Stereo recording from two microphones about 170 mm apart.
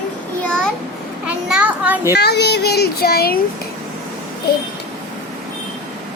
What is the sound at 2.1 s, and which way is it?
Speech, 75° left (ahead or behind).